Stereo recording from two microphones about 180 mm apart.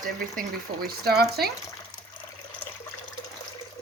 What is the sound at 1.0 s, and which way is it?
Speech, 60° right (ahead or behind).